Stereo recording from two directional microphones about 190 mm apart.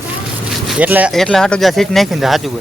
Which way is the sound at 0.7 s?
10° right (ahead or behind).